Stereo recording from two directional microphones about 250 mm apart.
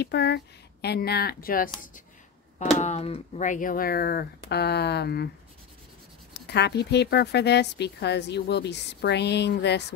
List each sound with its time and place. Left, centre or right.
0.0 s speech: left
2.8 s speech: left
6.3 s speech: left